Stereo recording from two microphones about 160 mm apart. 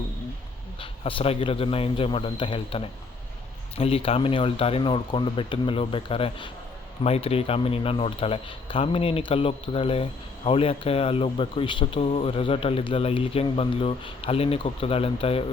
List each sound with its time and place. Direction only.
0.8 s speech: 35° left (ahead or behind)